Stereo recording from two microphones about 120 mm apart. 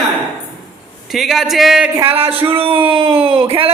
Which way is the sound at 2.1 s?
55° right (ahead or behind).